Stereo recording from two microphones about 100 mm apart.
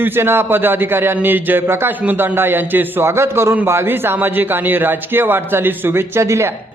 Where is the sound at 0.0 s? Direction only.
25° right (ahead or behind).